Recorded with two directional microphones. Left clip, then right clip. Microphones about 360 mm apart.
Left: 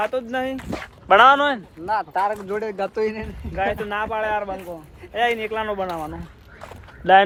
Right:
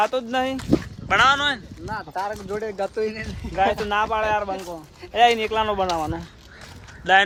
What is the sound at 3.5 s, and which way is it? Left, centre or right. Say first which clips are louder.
Speech: right 3 dB; centre.